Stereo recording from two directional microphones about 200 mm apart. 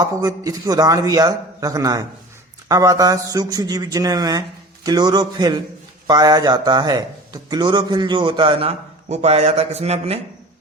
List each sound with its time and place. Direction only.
0.0 s a man's voice: 20° right (ahead or behind)